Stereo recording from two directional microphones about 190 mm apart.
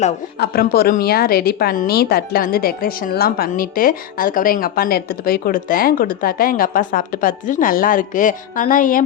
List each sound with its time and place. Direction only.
0.3 s a woman's voice: 55° left (ahead or behind)